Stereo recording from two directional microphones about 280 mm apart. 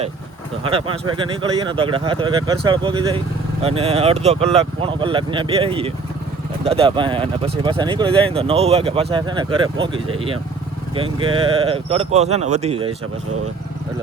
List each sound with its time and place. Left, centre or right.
0.6 s speech: centre